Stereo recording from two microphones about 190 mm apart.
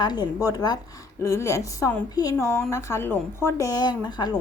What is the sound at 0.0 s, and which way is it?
A woman's voice, 20° left (ahead or behind).